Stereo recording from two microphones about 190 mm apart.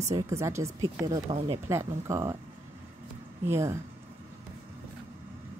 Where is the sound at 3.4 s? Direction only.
15° right (ahead or behind).